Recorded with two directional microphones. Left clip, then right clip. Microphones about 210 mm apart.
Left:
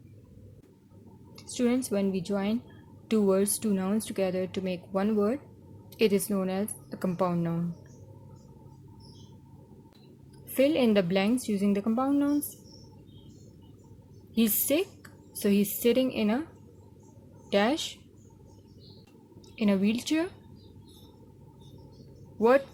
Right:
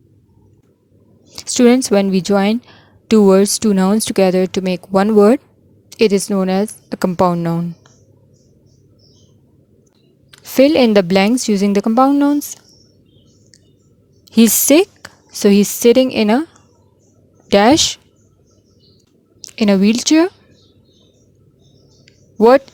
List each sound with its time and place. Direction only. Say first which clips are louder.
1.4 s speech: right 17 dB; 45° right (ahead or behind)
10.5 s speech: right 14 dB; 45° right (ahead or behind)
14.3 s a woman's voice: right 16 dB; 45° right (ahead or behind)
17.5 s speech: right 16 dB; 50° right (ahead or behind)
19.5 s speech: right 14 dB; 45° right (ahead or behind)
22.4 s a woman's voice: right 13 dB; 45° right (ahead or behind)